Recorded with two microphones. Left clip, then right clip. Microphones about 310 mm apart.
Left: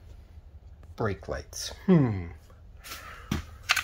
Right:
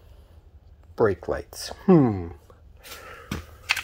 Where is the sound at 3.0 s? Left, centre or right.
Centre.